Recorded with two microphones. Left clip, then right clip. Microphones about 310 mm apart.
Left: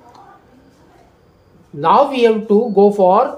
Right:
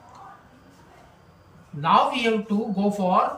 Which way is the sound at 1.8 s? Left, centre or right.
Centre.